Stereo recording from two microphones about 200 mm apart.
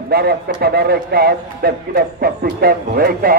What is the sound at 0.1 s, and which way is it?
A man's voice, 50° right (ahead or behind).